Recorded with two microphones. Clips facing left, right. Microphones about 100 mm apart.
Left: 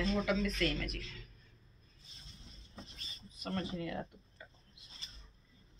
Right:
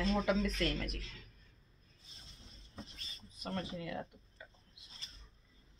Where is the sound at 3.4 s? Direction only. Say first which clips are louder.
Left 2 dB; 10° right (ahead or behind).